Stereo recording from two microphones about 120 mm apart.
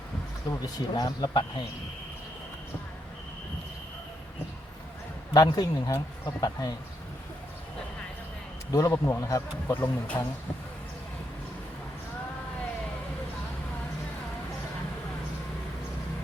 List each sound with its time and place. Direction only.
0.5 s a man's voice: 30° left (ahead or behind)
5.3 s a man's voice: 35° left (ahead or behind)
8.7 s speech: 25° left (ahead or behind)